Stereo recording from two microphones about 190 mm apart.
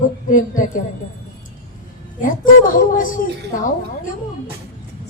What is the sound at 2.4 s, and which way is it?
Speech, 45° left (ahead or behind).